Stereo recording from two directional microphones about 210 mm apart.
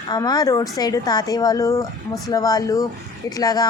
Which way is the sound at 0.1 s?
20° left (ahead or behind).